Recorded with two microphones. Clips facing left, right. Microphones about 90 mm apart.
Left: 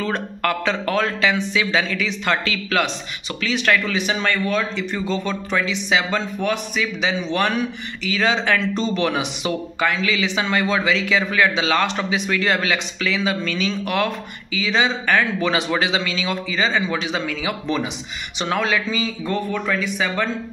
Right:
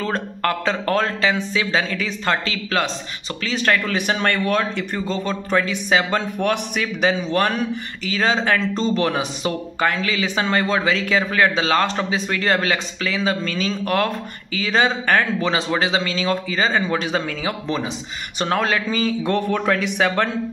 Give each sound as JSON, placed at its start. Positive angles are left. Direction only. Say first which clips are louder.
{"t": 0.0, "sound": "speech", "louder": "even", "side_deg": -35}
{"t": 3.8, "sound": "a man's voice", "louder": "right 1 dB", "side_deg": -50}
{"t": 4.9, "sound": "speech", "louder": "left 1 dB", "side_deg": -35}
{"t": 15.4, "sound": "speech", "louder": "even", "side_deg": -30}